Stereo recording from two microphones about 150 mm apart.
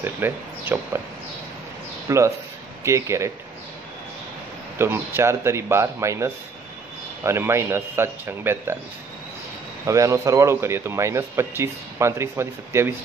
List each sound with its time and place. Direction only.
0.0 s speech: 15° right (ahead or behind)
2.0 s a man's voice: 20° right (ahead or behind)
4.7 s speech: 15° right (ahead or behind)
9.8 s a man's voice: 20° right (ahead or behind)